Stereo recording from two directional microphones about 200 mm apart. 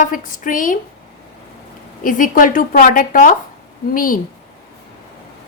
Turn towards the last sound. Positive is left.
turn(degrees=45)  # may be behind; listen again after turning